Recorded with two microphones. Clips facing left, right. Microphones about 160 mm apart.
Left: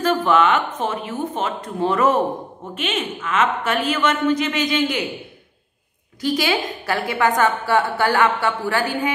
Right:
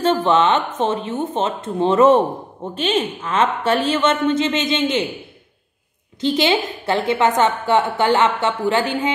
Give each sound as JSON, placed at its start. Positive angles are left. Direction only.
{"t": 0.0, "sound": "a woman's voice", "side_deg": -25}
{"t": 6.2, "sound": "a woman's voice", "side_deg": -25}